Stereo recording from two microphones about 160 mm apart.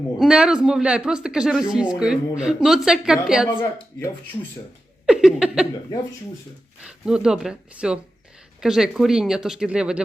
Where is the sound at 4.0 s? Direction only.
15° left (ahead or behind).